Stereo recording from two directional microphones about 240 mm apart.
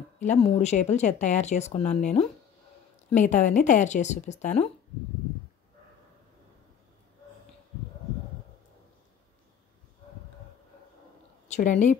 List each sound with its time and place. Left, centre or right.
0.2 s speech: left
11.4 s speech: left